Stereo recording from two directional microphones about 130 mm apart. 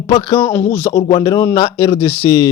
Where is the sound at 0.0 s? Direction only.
30° left (ahead or behind).